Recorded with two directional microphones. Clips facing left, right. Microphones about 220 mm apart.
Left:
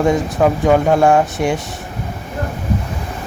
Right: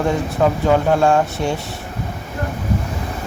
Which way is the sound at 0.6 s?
15° left (ahead or behind).